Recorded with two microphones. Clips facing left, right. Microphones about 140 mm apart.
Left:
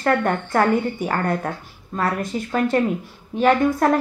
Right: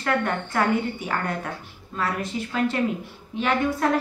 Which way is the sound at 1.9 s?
45° left (ahead or behind).